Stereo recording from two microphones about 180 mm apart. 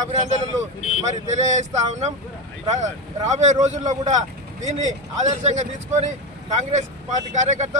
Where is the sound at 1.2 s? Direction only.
40° right (ahead or behind).